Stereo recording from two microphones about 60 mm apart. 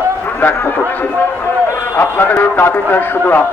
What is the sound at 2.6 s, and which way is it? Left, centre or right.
Speech, left.